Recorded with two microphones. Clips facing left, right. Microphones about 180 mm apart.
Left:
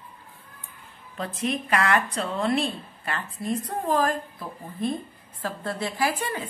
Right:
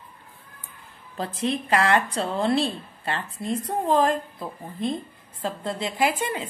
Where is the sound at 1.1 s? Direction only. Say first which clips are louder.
Right 2 dB; 30° right (ahead or behind).